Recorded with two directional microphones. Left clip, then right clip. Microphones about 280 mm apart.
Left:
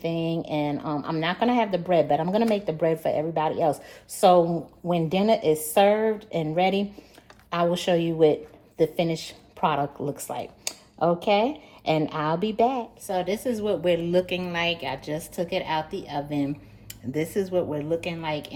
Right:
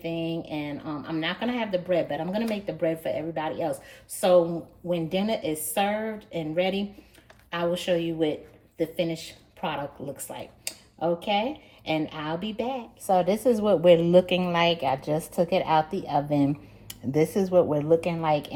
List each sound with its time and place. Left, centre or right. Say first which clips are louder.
0.0 s speech: left 3 dB; left
4.9 s a woman's voice: left 5 dB; left
13.1 s a woman's voice: right 6 dB; centre
17.8 s a woman's voice: right 5 dB; centre